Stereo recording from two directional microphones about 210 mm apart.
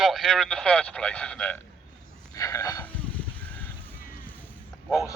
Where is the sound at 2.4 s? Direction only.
15° left (ahead or behind).